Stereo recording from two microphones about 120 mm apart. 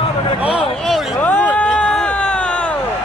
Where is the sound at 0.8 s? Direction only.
Centre (ahead or behind).